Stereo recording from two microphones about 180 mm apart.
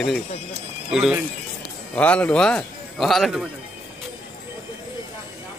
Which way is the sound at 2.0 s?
5° left (ahead or behind).